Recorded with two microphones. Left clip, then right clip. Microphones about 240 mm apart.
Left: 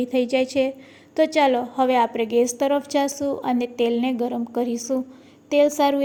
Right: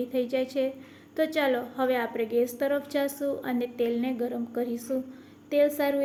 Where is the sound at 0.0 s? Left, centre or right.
Left.